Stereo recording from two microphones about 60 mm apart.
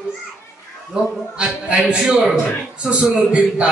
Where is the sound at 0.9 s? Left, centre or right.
Centre.